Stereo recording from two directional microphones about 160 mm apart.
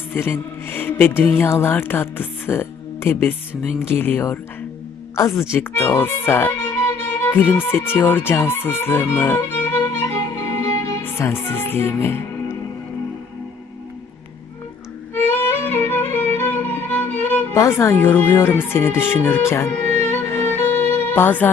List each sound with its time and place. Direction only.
0.1 s speech: 15° left (ahead or behind)
10.5 s music: 20° left (ahead or behind)
15.3 s music: 10° left (ahead or behind)
16.4 s speech: 10° left (ahead or behind)
19.8 s music: 45° right (ahead or behind)
20.3 s music: 10° left (ahead or behind)